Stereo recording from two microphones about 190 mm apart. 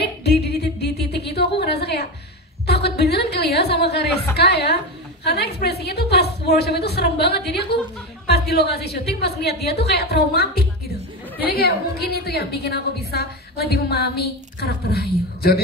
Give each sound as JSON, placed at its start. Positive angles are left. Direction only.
{"t": 0.0, "sound": "music", "side_deg": 60}
{"t": 2.6, "sound": "a woman's voice", "side_deg": 60}